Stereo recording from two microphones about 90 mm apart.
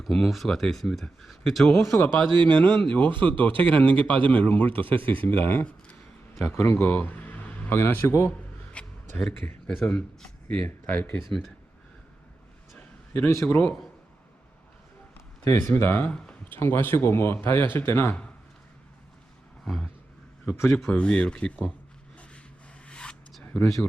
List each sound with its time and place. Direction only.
0.0 s a man's voice: centre (ahead or behind)
2.4 s speech: 60° right (ahead or behind)
2.8 s a man's voice: 15° left (ahead or behind)
8.7 s a sound: 10° left (ahead or behind)
9.6 s a man's voice: 5° left (ahead or behind)
10.9 s speech: 20° left (ahead or behind)
11.3 s speech: 5° left (ahead or behind)
13.1 s speech: 25° left (ahead or behind)
15.4 s speech: 35° left (ahead or behind)
19.6 s roaring cats: 5° left (ahead or behind)
20.7 s a man's voice: 10° left (ahead or behind)
22.9 s a sound: 10° left (ahead or behind)